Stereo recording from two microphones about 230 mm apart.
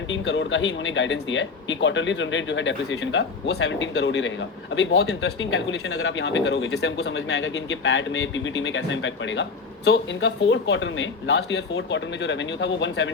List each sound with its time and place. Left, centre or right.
0.1 s speech: left